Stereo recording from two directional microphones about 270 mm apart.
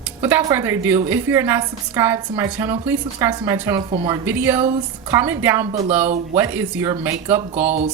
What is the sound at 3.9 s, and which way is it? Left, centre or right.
Speech, right.